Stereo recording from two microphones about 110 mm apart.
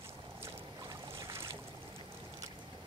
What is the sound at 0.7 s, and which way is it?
Boat, 35° right (ahead or behind).